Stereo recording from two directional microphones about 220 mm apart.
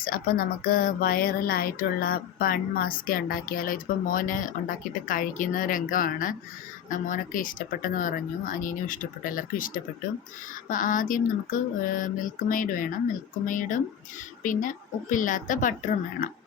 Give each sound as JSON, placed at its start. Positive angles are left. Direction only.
{"t": 0.0, "sound": "speech", "side_deg": 40}